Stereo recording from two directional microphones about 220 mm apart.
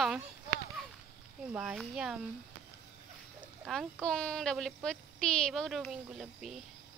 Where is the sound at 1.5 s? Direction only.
5° right (ahead or behind).